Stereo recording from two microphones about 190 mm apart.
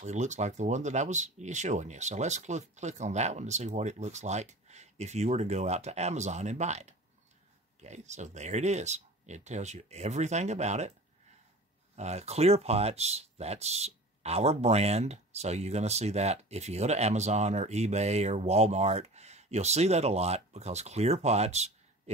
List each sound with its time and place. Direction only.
0.0 s speech: 40° right (ahead or behind)
11.9 s speech: 35° right (ahead or behind)